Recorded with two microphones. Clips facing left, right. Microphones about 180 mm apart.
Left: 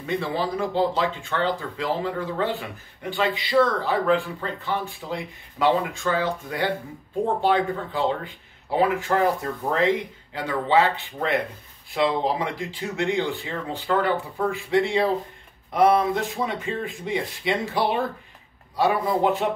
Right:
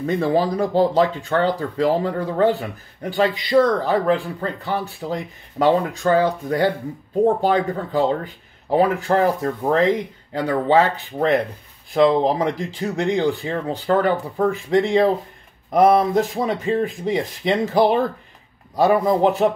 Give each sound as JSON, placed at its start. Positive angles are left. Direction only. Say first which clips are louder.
{"t": 0.0, "sound": "a man's voice", "louder": "right 7 dB", "side_deg": -40}